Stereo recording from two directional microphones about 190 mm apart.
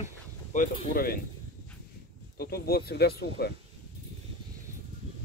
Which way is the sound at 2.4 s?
55° left (ahead or behind).